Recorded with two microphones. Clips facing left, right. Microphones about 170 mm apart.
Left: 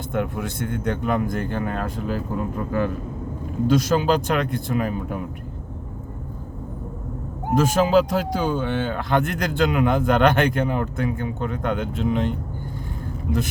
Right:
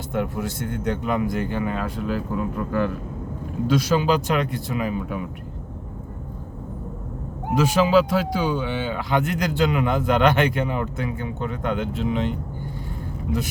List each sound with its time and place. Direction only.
0.1 s speech: 55° left (ahead or behind)
2.3 s speech: centre (ahead or behind)
3.7 s speech: 45° left (ahead or behind)
7.5 s speech: 45° left (ahead or behind)